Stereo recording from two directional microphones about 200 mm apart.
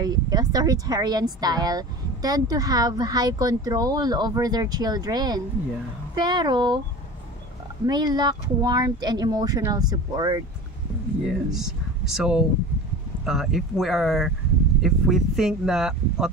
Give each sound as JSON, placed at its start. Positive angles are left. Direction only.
{"t": 0.0, "sound": "speech", "side_deg": -20}
{"t": 7.8, "sound": "speech", "side_deg": -20}
{"t": 11.2, "sound": "speech", "side_deg": 0}